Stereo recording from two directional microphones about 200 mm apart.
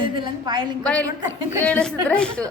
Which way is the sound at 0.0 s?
25° right (ahead or behind).